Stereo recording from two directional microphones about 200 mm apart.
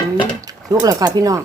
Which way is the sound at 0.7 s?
15° right (ahead or behind).